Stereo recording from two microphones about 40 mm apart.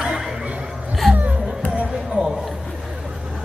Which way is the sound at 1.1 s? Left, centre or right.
Right.